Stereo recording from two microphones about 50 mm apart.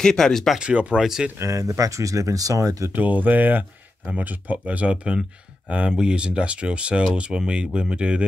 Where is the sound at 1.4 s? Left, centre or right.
Right.